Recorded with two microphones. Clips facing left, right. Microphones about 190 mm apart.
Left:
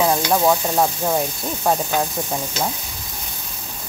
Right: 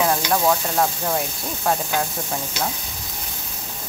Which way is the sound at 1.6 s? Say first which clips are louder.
Left 3 dB; 20° left (ahead or behind).